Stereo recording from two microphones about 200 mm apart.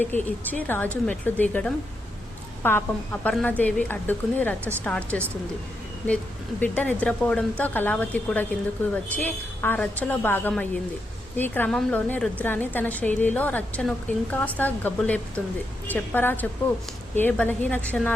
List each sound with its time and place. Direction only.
0.0 s a woman's voice: 10° left (ahead or behind)
6.6 s a woman's voice: 5° left (ahead or behind)